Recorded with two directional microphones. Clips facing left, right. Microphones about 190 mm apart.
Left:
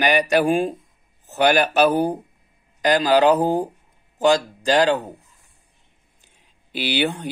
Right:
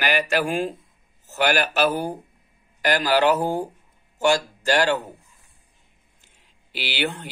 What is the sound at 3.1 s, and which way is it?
Speech, 20° left (ahead or behind).